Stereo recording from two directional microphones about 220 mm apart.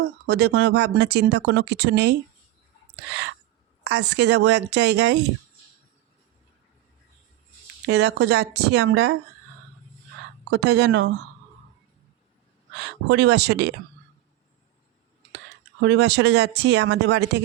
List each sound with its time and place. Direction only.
0.3 s speech: 45° right (ahead or behind)
2.9 s a sound: 55° right (ahead or behind)
3.8 s speech: 50° right (ahead or behind)
7.9 s speech: 50° right (ahead or behind)
10.5 s speech: 50° right (ahead or behind)
12.7 s speech: 50° right (ahead or behind)
15.8 s speech: 50° right (ahead or behind)